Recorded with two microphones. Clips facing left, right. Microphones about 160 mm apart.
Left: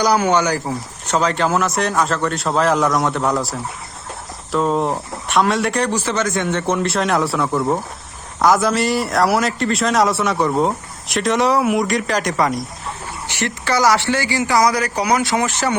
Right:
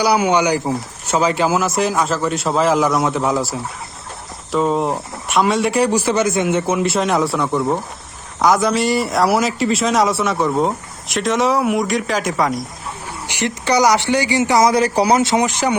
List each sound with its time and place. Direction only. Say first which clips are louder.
0.0 s a man's voice: right 1 dB; 10° right (ahead or behind)
13.2 s speech: right 3 dB; 15° right (ahead or behind)